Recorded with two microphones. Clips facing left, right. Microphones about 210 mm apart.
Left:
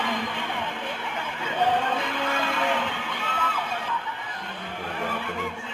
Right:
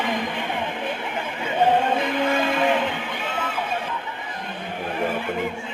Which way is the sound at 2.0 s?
15° right (ahead or behind).